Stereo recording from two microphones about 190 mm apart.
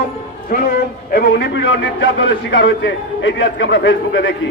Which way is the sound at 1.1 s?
55° left (ahead or behind).